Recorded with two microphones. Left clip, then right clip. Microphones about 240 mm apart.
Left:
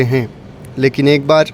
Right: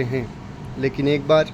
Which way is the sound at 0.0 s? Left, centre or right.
Left.